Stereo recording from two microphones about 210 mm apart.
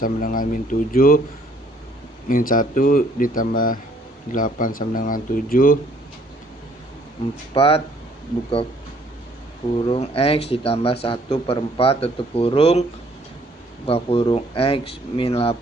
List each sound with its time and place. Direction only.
0.0 s speech: 40° left (ahead or behind)
2.3 s speech: 40° left (ahead or behind)
7.5 s a man's voice: 25° left (ahead or behind)
9.8 s a man's voice: 25° left (ahead or behind)
13.8 s a man's voice: 25° left (ahead or behind)